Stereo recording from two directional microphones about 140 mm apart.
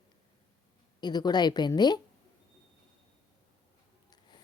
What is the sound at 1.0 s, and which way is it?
Speech, 30° left (ahead or behind).